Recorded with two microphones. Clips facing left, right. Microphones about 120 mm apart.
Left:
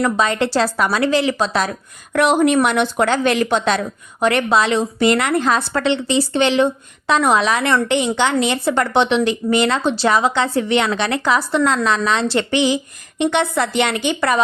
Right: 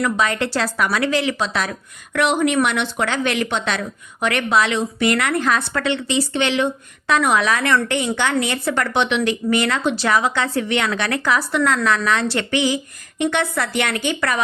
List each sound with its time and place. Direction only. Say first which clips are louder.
0.0 s a woman's voice: left 3 dB; 30° left (ahead or behind)